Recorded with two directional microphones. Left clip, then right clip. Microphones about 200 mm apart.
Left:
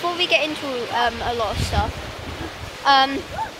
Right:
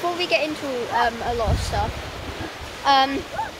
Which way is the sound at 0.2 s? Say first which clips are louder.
Left 2 dB; centre (ahead or behind).